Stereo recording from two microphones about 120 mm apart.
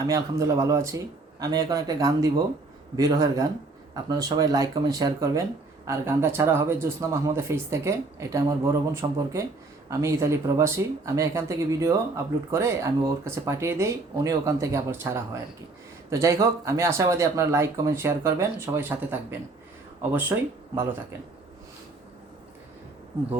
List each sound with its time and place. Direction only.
0.0 s speech: 30° right (ahead or behind)